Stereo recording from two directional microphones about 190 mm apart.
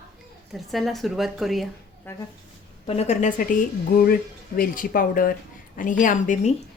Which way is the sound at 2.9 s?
35° left (ahead or behind).